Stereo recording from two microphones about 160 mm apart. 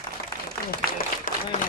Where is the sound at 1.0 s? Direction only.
65° left (ahead or behind).